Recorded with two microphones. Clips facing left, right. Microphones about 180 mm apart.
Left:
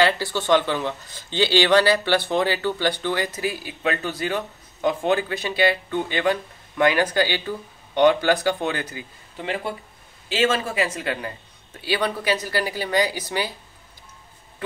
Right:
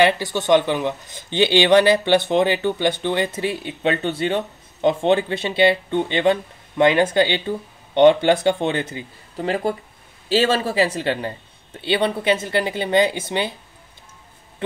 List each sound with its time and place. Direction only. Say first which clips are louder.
0.0 s speech: right 3 dB; 20° right (ahead or behind)
9.4 s speech: right 6 dB; 40° right (ahead or behind); by 13.6 s 25° right (ahead or behind)